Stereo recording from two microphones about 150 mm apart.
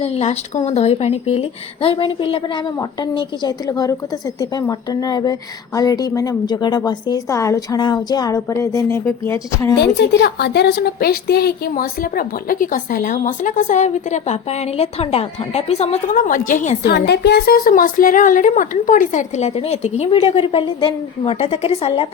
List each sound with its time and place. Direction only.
0.0 s speech: 45° left (ahead or behind); by 9.7 s 20° left (ahead or behind)
10.2 s a woman's voice: 90° left; by 17.0 s 75° left (ahead or behind)
17.1 s a woman's voice: 90° left; by 22.0 s 40° left (ahead or behind)